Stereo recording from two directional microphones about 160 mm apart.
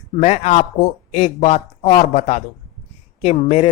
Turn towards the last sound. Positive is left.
turn(degrees=45)  # may be behind; listen again after turning